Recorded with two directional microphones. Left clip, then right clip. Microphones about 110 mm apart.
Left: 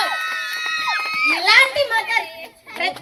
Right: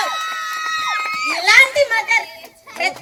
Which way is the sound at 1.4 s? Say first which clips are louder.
Right 4 dB; 30° right (ahead or behind).